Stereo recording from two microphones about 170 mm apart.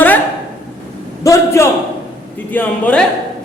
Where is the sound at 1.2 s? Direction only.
20° left (ahead or behind).